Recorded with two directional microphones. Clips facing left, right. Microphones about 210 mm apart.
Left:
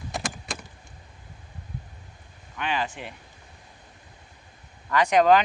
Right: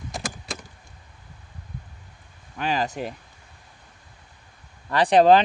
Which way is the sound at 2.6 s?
40° right (ahead or behind).